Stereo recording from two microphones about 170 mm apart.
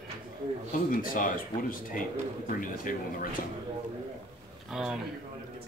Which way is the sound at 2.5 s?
55° left (ahead or behind).